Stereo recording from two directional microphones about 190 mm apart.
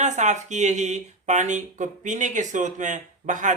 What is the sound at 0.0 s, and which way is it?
Speech, 40° right (ahead or behind).